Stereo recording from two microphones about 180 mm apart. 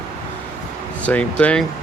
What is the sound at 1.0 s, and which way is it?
Speech, 5° left (ahead or behind).